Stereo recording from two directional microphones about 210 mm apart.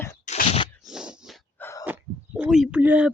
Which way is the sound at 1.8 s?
5° right (ahead or behind).